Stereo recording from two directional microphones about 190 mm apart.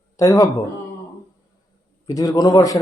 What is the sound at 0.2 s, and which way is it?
Speech, 20° left (ahead or behind).